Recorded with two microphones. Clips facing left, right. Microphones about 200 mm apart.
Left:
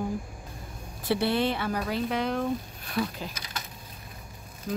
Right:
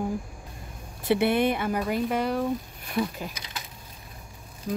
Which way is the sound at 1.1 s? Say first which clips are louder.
Right 3 dB; 20° right (ahead or behind).